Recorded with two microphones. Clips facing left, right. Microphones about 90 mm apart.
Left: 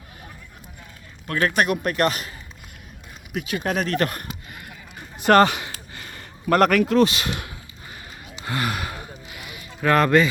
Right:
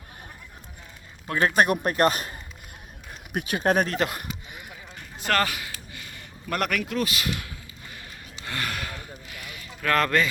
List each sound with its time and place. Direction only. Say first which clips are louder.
1.3 s speech: even; 15° right (ahead or behind)
1.6 s speech: even; 30° right (ahead or behind)
3.6 s speech: right 4 dB; 35° right (ahead or behind)
3.8 s speech: left 3 dB; 15° right (ahead or behind)
5.2 s a sound: left 9 dB; 25° left (ahead or behind)
8.4 s a sound: left 5 dB; 10° left (ahead or behind)